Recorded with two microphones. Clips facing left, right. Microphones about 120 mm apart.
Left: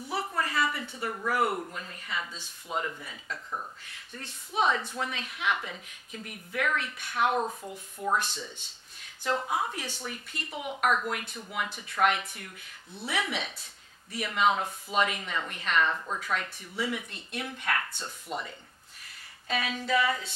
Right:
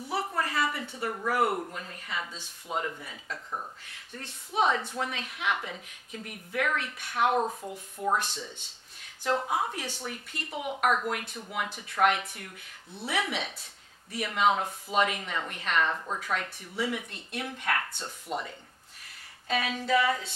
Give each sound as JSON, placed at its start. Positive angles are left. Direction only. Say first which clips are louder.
{"t": 0.1, "sound": "a sound", "louder": "right 1 dB", "side_deg": -40}
{"t": 1.6, "sound": "a woman's voice", "louder": "right 1 dB", "side_deg": -35}
{"t": 5.1, "sound": "speech", "louder": "even", "side_deg": -45}
{"t": 7.3, "sound": "speech", "louder": "right 2 dB", "side_deg": -25}
{"t": 9.2, "sound": "a woman's voice", "louder": "right 1 dB", "side_deg": -40}
{"t": 10.0, "sound": "speech", "louder": "right 1 dB", "side_deg": -50}
{"t": 17.9, "sound": "speech", "louder": "right 2 dB", "side_deg": -30}
{"t": 19.4, "sound": "speech", "louder": "right 2 dB", "side_deg": -50}